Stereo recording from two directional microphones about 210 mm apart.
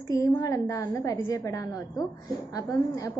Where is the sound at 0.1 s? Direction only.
15° left (ahead or behind).